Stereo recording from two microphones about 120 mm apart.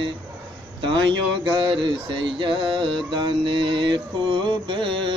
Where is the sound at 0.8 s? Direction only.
40° right (ahead or behind).